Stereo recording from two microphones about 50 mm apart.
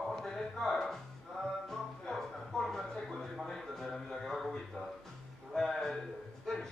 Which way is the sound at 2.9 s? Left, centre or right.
Centre.